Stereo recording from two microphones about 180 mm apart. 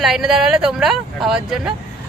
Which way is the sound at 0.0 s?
Centre (ahead or behind).